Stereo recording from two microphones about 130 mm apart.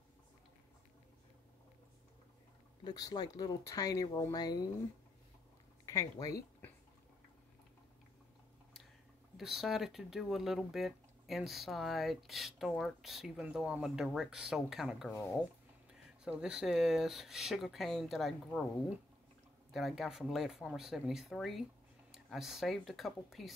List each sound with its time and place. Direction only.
2.8 s speech: 30° left (ahead or behind)
5.9 s speech: 25° left (ahead or behind)
9.4 s speech: centre (ahead or behind)
19.7 s speech: centre (ahead or behind)